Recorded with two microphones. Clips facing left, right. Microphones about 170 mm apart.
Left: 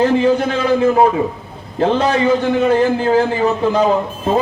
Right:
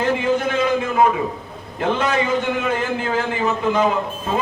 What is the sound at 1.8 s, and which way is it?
A man's voice, 35° left (ahead or behind).